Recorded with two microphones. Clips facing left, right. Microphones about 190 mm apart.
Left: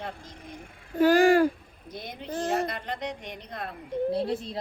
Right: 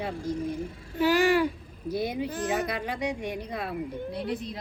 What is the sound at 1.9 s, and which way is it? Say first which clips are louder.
Speech: right 7 dB; 10° right (ahead or behind).